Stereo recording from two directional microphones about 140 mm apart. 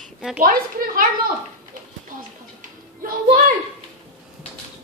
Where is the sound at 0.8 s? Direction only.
90° right.